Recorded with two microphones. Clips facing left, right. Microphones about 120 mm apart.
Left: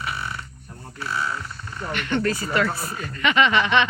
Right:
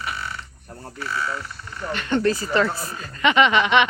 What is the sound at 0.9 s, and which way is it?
Speech, 20° left (ahead or behind).